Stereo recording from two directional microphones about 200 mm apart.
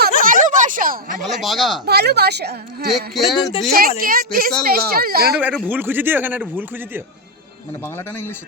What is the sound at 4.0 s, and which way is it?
Speech, 45° right (ahead or behind).